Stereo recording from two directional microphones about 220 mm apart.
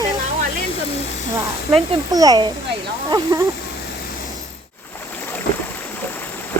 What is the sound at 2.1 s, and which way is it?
Speech, 15° right (ahead or behind).